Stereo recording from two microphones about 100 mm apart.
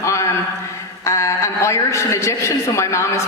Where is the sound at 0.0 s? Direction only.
30° left (ahead or behind).